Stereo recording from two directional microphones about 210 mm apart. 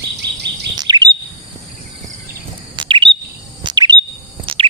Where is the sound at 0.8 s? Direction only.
20° right (ahead or behind).